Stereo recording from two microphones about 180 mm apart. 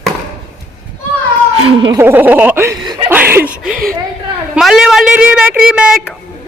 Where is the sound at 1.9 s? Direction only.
10° right (ahead or behind).